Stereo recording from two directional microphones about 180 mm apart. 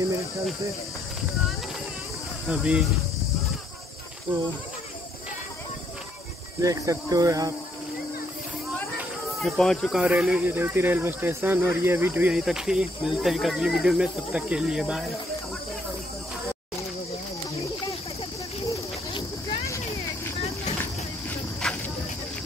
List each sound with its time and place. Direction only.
2.4 s speech: 5° right (ahead or behind)
4.3 s speech: 30° right (ahead or behind)
6.6 s speech: 20° right (ahead or behind)
8.9 s speech: centre (ahead or behind)
18.7 s a sound: 20° left (ahead or behind)
21.3 s a sound: 5° left (ahead or behind)